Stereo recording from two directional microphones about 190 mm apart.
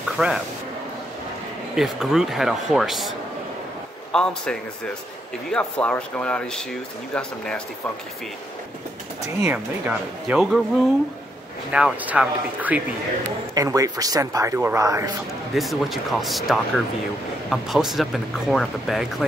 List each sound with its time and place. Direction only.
0.2 s speech: 5° right (ahead or behind)
1.8 s speech: 5° right (ahead or behind)
9.5 s speech: 5° right (ahead or behind)
11.7 s a man's voice: 5° right (ahead or behind)
13.6 s a man's voice: 20° right (ahead or behind)
15.5 s speech: centre (ahead or behind)